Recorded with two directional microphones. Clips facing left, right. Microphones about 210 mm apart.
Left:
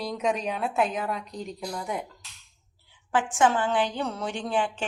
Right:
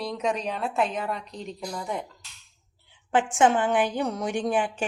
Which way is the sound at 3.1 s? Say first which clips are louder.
Right 2 dB; 20° right (ahead or behind).